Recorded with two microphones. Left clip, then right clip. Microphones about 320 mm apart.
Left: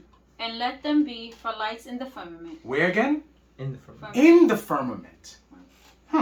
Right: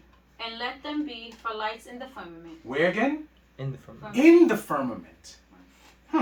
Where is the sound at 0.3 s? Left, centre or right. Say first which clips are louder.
Left 4 dB; left.